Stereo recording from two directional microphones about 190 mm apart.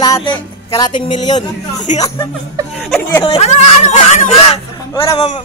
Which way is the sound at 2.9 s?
10° left (ahead or behind).